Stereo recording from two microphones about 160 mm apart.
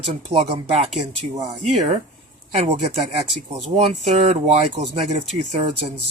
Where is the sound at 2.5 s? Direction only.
45° right (ahead or behind).